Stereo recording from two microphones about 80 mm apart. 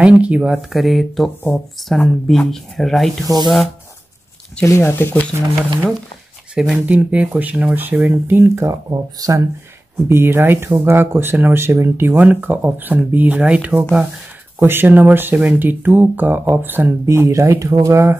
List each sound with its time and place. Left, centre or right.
0.0 s speech: centre
0.6 s speech: centre
4.6 s speech: left
6.5 s speech: centre; by 8.7 s right
9.2 s speech: right
10.0 s speech: right
17.0 s speech: right